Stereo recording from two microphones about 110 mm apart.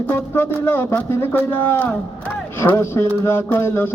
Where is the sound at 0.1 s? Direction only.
20° left (ahead or behind).